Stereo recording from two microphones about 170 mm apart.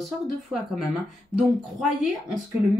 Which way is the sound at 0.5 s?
5° left (ahead or behind).